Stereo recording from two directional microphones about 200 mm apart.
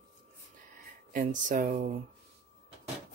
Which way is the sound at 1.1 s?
40° right (ahead or behind).